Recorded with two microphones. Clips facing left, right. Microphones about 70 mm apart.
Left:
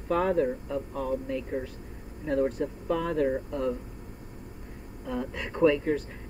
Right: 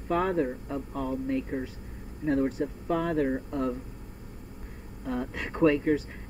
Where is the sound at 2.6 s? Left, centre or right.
Centre.